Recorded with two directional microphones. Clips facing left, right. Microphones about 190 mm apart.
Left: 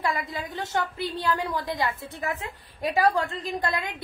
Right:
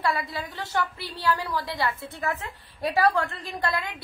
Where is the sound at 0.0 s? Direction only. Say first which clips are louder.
Right 1 dB; 20° left (ahead or behind).